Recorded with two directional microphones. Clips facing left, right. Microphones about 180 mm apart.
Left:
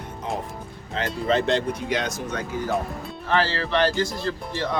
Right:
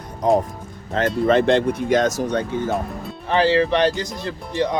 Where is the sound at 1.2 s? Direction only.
55° right (ahead or behind).